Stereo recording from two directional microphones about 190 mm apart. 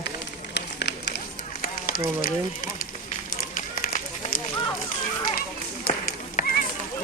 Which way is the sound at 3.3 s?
50° left (ahead or behind).